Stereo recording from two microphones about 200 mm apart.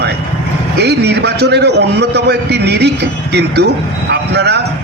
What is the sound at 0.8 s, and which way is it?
A man's voice, 55° right (ahead or behind).